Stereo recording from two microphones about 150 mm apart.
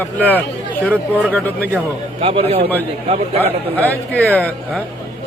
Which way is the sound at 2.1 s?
40° right (ahead or behind).